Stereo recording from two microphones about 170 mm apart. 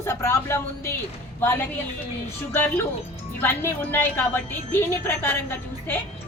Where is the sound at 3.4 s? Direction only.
10° left (ahead or behind).